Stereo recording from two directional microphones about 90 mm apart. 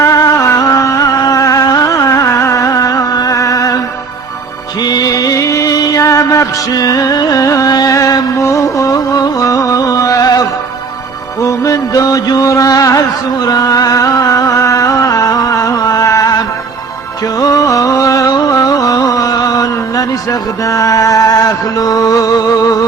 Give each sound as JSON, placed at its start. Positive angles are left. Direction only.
{"t": 0.0, "sound": "music", "side_deg": 40}
{"t": 4.8, "sound": "music", "side_deg": 50}
{"t": 11.4, "sound": "music", "side_deg": 40}
{"t": 17.4, "sound": "a sound", "side_deg": 40}
{"t": 20.7, "sound": "music", "side_deg": 40}